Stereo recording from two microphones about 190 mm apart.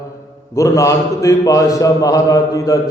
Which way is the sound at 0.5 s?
15° left (ahead or behind).